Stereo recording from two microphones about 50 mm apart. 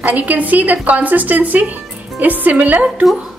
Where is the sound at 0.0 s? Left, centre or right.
Right.